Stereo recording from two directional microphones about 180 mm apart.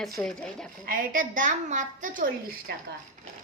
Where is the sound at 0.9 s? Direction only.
50° right (ahead or behind).